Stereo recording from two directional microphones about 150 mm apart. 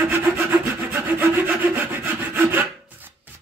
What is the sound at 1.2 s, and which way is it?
Rub, 10° right (ahead or behind).